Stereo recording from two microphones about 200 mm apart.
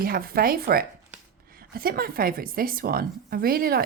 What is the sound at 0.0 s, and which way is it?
Speech, 50° right (ahead or behind).